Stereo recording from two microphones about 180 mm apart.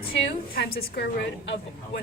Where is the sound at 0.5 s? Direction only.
60° left (ahead or behind).